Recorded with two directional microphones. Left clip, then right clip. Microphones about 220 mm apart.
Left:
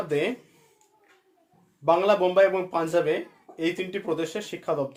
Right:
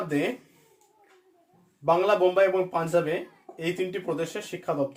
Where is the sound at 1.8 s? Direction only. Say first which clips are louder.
Left 1 dB; 40° left (ahead or behind).